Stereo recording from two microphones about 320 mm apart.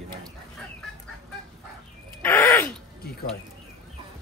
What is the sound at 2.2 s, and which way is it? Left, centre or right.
Groan, centre.